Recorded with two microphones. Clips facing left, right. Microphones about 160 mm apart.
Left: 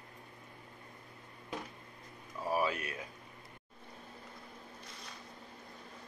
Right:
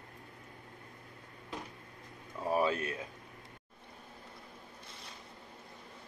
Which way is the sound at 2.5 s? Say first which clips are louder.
Right 3 dB; 30° right (ahead or behind).